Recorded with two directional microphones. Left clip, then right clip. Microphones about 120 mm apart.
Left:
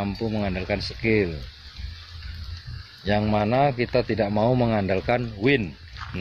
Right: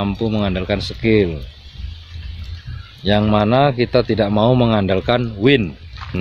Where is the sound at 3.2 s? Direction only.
55° right (ahead or behind).